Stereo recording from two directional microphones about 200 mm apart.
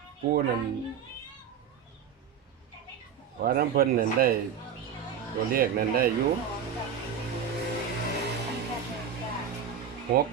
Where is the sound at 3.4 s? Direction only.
50° right (ahead or behind).